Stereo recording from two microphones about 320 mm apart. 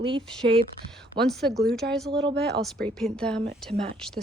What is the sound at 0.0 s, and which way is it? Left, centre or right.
Speech, centre.